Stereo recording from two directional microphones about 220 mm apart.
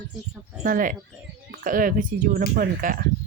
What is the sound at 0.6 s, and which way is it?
Speech, 40° right (ahead or behind).